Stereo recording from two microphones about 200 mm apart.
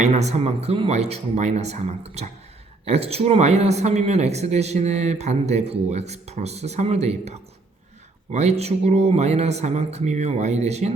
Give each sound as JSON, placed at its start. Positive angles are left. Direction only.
{"t": 0.0, "sound": "speech", "side_deg": -35}